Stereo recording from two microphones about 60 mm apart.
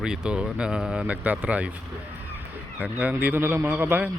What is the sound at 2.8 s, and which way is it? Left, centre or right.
Speech, right.